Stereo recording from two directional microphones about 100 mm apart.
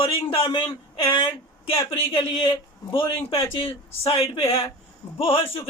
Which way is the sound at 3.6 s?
80° left.